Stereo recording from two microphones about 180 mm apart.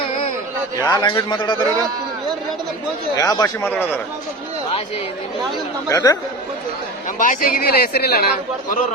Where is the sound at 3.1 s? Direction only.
20° left (ahead or behind).